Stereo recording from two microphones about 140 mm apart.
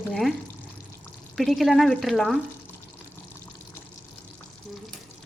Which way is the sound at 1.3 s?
Centre (ahead or behind).